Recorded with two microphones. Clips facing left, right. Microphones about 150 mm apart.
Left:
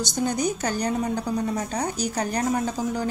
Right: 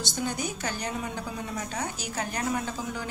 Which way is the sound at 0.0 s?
40° left (ahead or behind).